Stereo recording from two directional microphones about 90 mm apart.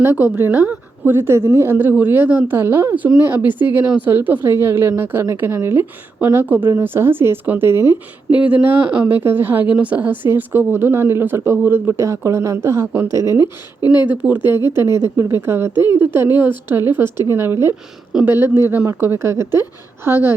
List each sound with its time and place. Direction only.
0.0 s speech: 25° right (ahead or behind)
8.4 s speech: 15° right (ahead or behind); by 13.4 s 35° right (ahead or behind)
13.4 s speech: 50° left (ahead or behind)
14.5 s speech: 30° right (ahead or behind)